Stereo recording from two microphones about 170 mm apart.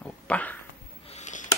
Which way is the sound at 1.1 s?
45° left (ahead or behind).